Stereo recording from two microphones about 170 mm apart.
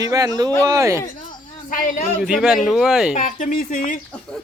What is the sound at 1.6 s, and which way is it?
Speech, 50° left (ahead or behind).